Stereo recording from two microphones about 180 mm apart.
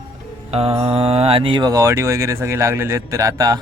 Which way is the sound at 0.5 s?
35° right (ahead or behind).